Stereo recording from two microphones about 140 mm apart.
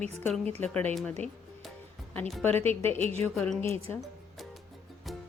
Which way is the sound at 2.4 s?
15° left (ahead or behind).